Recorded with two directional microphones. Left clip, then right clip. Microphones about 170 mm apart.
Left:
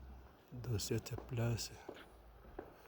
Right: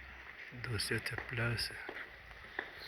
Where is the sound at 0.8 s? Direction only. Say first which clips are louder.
Right 6 dB; 50° left (ahead or behind).